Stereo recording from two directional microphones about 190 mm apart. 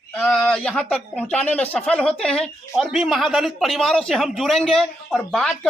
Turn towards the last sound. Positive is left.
turn(degrees=0)  # may be behind; listen again after turning